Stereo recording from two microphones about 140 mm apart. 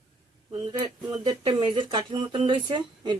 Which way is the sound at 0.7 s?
30° right (ahead or behind).